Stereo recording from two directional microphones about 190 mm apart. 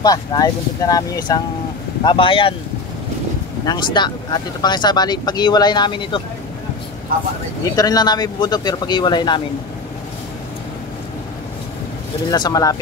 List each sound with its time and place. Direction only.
0.0 s speech: 20° left (ahead or behind)
3.6 s speech: 25° left (ahead or behind)
7.7 s speech: 20° left (ahead or behind)
12.3 s speech: 20° left (ahead or behind)